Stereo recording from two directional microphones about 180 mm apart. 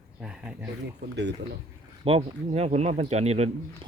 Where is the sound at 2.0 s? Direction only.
35° right (ahead or behind).